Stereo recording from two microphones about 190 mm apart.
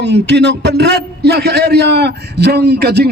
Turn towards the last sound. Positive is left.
turn(degrees=-60)  # may be behind; listen again after turning